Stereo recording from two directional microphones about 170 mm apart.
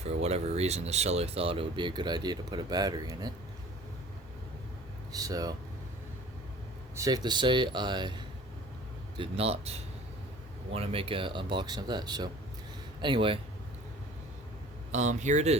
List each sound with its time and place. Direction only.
0.0 s speech: 40° right (ahead or behind); by 3.3 s 25° right (ahead or behind)
5.1 s speech: 20° right (ahead or behind)
6.9 s speech: 20° right (ahead or behind); by 9.7 s 35° right (ahead or behind)
10.8 s speech: 35° right (ahead or behind)
14.9 s speech: 45° right (ahead or behind)